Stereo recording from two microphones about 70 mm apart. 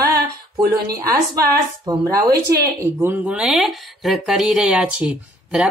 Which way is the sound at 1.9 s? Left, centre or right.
Right.